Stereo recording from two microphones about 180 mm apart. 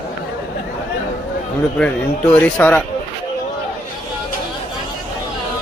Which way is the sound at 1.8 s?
5° left (ahead or behind).